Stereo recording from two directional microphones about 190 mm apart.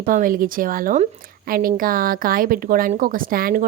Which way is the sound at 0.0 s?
45° right (ahead or behind).